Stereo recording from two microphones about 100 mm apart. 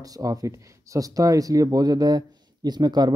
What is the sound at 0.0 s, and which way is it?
Speech, 35° right (ahead or behind).